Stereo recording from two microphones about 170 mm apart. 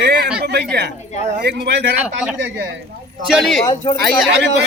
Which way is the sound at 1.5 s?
75° right (ahead or behind).